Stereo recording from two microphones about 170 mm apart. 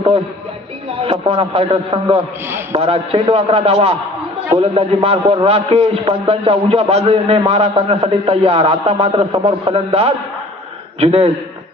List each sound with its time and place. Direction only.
1.0 s a man's voice: 30° right (ahead or behind)